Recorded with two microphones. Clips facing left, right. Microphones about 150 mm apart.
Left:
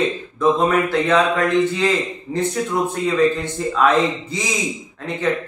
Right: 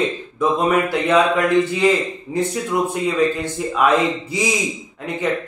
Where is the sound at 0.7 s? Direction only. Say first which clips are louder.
Even; 10° right (ahead or behind).